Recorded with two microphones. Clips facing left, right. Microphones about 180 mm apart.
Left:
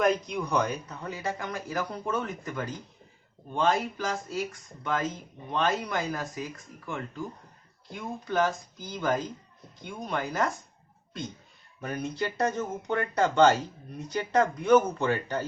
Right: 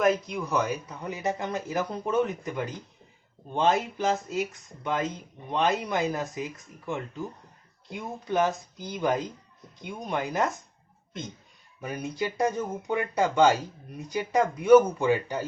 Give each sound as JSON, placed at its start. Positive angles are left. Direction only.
{"t": 0.0, "sound": "speech", "side_deg": 0}
{"t": 11.8, "sound": "speech", "side_deg": -10}